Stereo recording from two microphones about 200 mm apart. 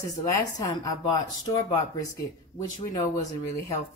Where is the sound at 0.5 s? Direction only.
20° left (ahead or behind).